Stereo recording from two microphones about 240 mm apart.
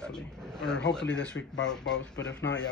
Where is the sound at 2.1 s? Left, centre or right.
Left.